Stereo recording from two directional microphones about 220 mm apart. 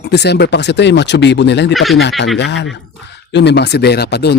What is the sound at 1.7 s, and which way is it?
Speech, centre (ahead or behind).